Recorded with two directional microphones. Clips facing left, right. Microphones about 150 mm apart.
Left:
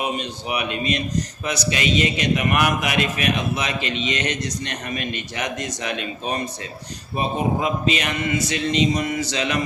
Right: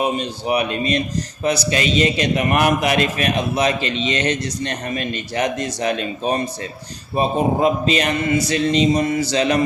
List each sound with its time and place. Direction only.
0.0 s a man's voice: 35° right (ahead or behind)